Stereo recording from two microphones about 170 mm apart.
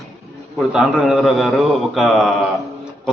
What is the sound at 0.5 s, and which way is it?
A man's voice, centre (ahead or behind).